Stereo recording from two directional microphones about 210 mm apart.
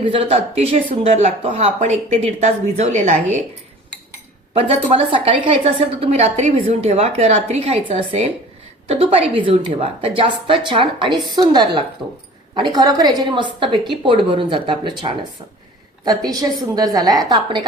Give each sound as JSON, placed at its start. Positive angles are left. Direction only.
{"t": 0.0, "sound": "speech", "side_deg": -25}
{"t": 4.5, "sound": "a woman's voice", "side_deg": -25}